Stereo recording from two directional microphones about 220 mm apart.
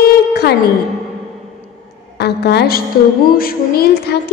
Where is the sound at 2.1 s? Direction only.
50° left (ahead or behind).